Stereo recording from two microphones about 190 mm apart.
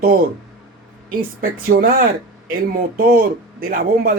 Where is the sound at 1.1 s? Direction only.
50° right (ahead or behind).